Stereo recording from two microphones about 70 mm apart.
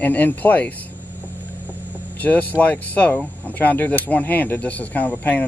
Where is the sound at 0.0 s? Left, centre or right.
Left.